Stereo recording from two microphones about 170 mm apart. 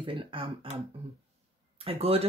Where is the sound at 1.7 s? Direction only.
35° right (ahead or behind).